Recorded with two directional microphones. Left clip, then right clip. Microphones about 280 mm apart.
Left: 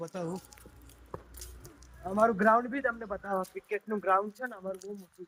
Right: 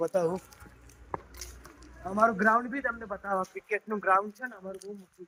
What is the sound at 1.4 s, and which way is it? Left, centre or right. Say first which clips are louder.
A man's voice: right 4 dB; centre.